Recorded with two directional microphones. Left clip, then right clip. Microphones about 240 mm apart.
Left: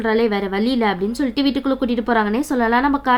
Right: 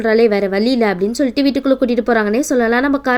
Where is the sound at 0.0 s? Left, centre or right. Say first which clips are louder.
Right 6 dB; centre.